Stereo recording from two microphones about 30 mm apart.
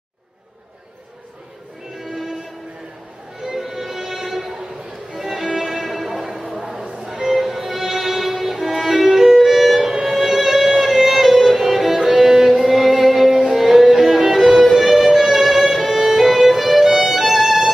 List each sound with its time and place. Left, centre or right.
2.0 s music: centre
3.4 s music: centre
5.1 s violin: centre
6.0 s music: centre
6.9 s music: right
7.2 s violin: centre
9.8 s music: centre
13.5 s violin: centre
16.8 s music: centre